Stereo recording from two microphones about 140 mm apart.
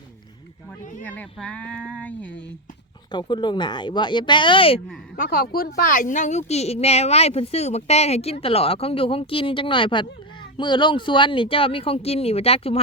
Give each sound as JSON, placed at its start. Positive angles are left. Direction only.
{"t": 1.0, "sound": "speech", "side_deg": 10}
{"t": 3.1, "sound": "speech", "side_deg": 30}
{"t": 5.1, "sound": "a woman's voice", "side_deg": 85}